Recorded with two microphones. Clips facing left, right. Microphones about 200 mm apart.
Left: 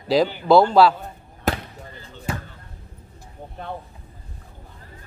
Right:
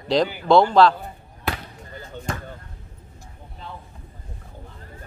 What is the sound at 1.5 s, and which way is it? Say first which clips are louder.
Basketball bounce: left 5 dB; 45° left (ahead or behind).